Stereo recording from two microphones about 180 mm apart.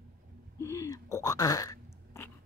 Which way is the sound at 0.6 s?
15° left (ahead or behind).